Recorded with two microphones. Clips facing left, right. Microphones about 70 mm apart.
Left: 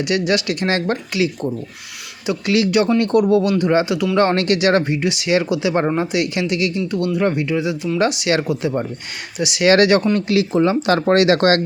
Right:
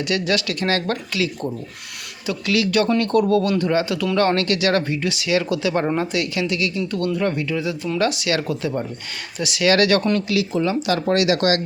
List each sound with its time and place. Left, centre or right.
0.0 s speech: centre
3.9 s speech: centre
4.2 s speech: left
6.7 s speech: centre; by 11.6 s left